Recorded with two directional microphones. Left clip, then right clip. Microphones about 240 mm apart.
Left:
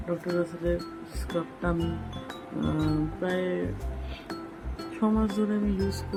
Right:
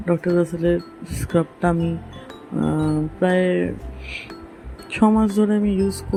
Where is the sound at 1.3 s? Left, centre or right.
Right.